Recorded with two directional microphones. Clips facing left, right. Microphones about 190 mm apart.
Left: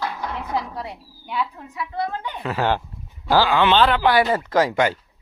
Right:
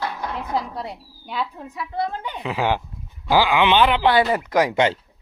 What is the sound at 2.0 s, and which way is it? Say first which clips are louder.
Speech: right 1 dB; 25° right (ahead or behind).